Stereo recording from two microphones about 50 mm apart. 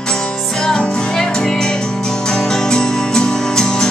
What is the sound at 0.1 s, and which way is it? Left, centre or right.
Music, centre.